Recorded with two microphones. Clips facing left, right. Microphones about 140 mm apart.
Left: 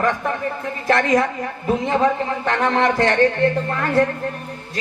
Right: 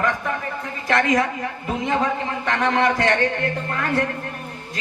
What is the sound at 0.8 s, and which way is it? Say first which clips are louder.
Speech: left 2 dB; 35° left (ahead or behind).